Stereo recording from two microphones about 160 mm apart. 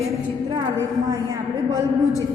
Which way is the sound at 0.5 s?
20° right (ahead or behind).